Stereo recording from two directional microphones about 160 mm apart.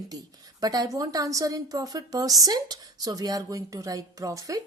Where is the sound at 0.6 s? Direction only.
25° right (ahead or behind).